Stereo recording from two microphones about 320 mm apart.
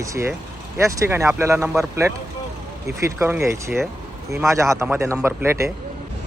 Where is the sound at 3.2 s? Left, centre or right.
Centre.